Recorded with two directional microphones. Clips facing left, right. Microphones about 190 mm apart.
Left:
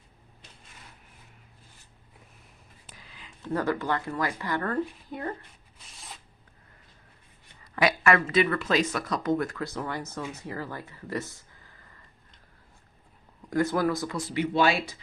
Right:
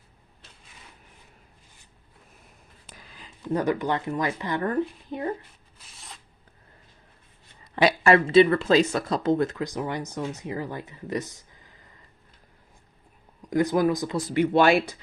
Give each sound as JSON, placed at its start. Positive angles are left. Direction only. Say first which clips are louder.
{"t": 3.0, "sound": "a sound", "louder": "right 3 dB", "side_deg": -40}
{"t": 3.5, "sound": "speech", "louder": "right 3 dB", "side_deg": -15}
{"t": 5.9, "sound": "a sound", "louder": "left 1 dB", "side_deg": 0}
{"t": 7.6, "sound": "speech", "louder": "right 3 dB", "side_deg": -30}
{"t": 13.5, "sound": "speech", "louder": "right 3 dB", "side_deg": -20}
{"t": 14.2, "sound": "speech", "louder": "right 6 dB", "side_deg": -50}